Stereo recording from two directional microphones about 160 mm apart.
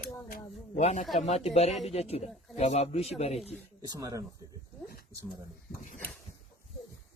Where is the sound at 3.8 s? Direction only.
20° right (ahead or behind).